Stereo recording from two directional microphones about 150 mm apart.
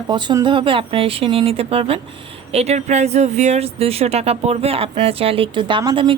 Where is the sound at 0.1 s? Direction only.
30° right (ahead or behind).